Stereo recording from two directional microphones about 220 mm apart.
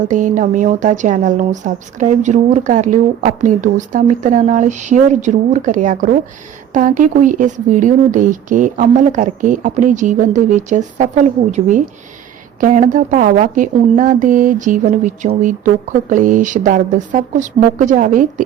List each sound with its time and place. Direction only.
0.0 s a woman's voice: 35° right (ahead or behind)